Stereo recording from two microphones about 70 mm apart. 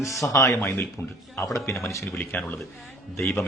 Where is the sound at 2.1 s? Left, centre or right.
Left.